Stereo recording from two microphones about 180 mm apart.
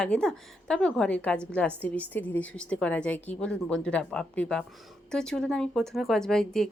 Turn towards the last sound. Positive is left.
turn(degrees=5)  # may be behind; listen again after turning